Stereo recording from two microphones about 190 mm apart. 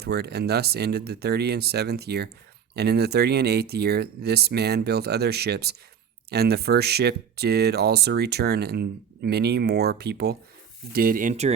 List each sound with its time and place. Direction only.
0.0 s speech: 60° right (ahead or behind); by 11.5 s 40° right (ahead or behind)